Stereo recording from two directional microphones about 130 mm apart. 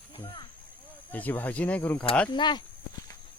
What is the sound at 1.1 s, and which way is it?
Speech, 15° left (ahead or behind).